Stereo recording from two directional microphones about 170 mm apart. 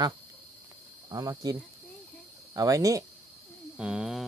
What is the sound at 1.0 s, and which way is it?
Speech, 20° right (ahead or behind).